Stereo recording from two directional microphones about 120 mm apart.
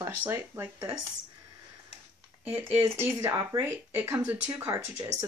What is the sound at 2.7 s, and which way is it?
Speech, 20° right (ahead or behind).